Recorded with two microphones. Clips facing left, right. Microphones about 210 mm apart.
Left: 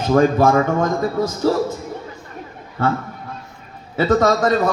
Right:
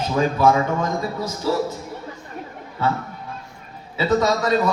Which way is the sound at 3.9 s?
50° left (ahead or behind).